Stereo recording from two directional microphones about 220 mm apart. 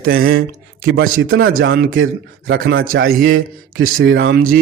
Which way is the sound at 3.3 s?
65° right (ahead or behind).